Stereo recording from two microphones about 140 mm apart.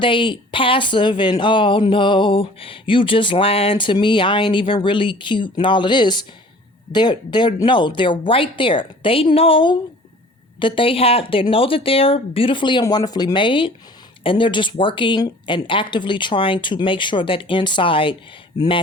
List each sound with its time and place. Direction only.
0.0 s speech: 35° left (ahead or behind)